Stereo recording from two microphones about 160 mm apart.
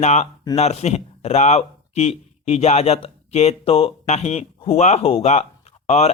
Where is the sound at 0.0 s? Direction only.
45° left (ahead or behind).